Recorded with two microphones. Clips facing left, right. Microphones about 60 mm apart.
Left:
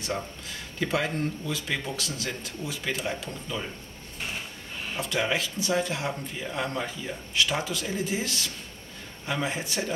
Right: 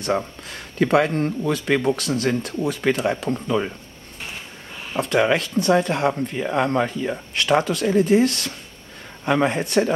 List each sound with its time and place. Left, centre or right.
0.0 s speech: right
4.9 s speech: right